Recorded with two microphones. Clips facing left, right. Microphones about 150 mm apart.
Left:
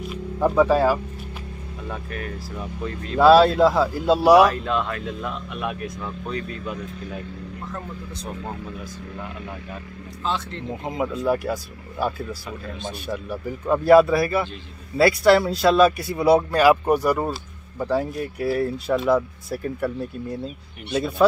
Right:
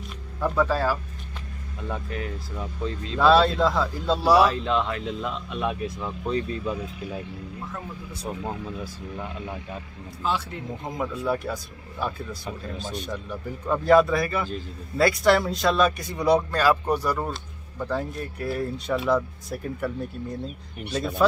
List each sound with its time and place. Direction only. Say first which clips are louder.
0.4 s speech: left 6 dB; 15° left (ahead or behind)
2.0 s speech: left 1 dB; 20° right (ahead or behind)
3.2 s speech: left 5 dB; 10° left (ahead or behind)
4.6 s speech: even; 20° right (ahead or behind)
7.7 s speech: left 2 dB; 5° right (ahead or behind)
10.8 s speech: left 4 dB; 10° left (ahead or behind)